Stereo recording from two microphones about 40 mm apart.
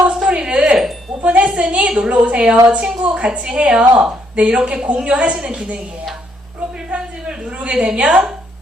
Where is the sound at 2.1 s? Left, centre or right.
Right.